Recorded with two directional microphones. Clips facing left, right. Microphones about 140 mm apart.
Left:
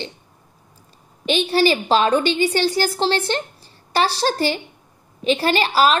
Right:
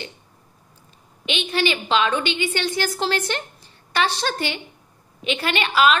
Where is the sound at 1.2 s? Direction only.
35° left (ahead or behind).